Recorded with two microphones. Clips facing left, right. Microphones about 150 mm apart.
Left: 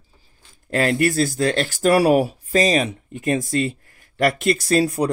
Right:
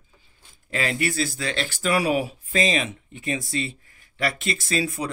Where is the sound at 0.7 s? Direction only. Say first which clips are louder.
Left 7 dB; 45° left (ahead or behind).